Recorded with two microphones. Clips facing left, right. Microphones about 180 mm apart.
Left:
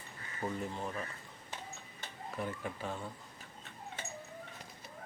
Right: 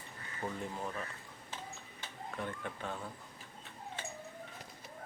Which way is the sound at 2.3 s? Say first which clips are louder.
Left 2 dB; 5° left (ahead or behind).